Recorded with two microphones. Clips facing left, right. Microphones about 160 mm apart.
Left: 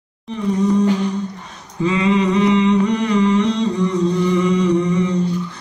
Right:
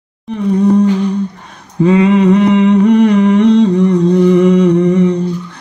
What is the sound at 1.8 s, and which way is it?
Humming, 55° right (ahead or behind).